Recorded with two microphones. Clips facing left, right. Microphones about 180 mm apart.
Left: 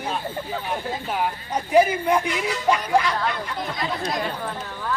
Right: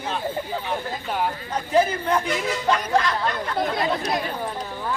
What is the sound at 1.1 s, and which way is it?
Speech, 5° left (ahead or behind).